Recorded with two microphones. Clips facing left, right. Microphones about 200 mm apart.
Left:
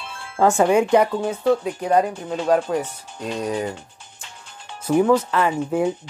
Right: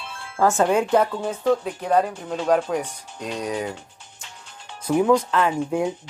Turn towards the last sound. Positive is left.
turn(degrees=5)  # may be behind; listen again after turning